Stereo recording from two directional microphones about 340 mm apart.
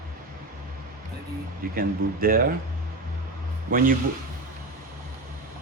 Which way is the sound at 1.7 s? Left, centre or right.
Right.